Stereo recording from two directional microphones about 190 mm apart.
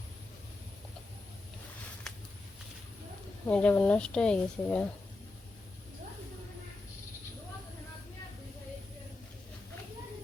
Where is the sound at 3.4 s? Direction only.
5° left (ahead or behind).